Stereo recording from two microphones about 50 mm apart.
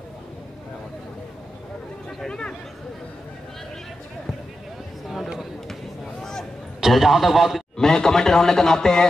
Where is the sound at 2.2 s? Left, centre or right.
Centre.